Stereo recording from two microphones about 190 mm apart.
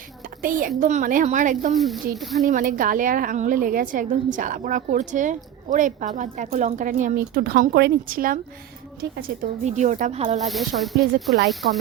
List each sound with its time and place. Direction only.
0.4 s a woman's voice: 45° right (ahead or behind)
1.7 s speech: centre (ahead or behind)
2.5 s a woman's voice: 45° right (ahead or behind)
10.4 s speech: centre (ahead or behind)